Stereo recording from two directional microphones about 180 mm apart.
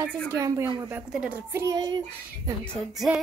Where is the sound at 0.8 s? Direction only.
5° right (ahead or behind).